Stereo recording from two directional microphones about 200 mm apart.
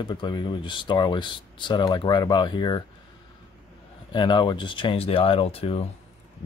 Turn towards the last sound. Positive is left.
turn(degrees=30)  # may be behind; listen again after turning